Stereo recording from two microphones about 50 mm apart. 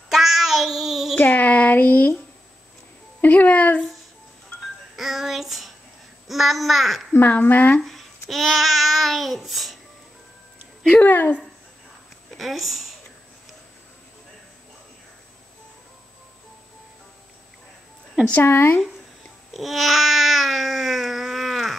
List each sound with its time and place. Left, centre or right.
0.1 s child singing: centre
1.2 s a sound: left
3.2 s speech: left
4.9 s child singing: centre
6.2 s a child's voice: centre
7.1 s speech: left
7.8 s a child's voice: centre
11.0 s speech: left
12.4 s speech: centre
18.4 s speech: left
19.5 s babbling: centre